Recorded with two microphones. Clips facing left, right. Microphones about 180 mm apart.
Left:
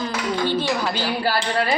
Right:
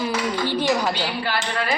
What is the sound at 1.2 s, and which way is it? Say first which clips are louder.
Speech: left 5 dB; 40° left (ahead or behind).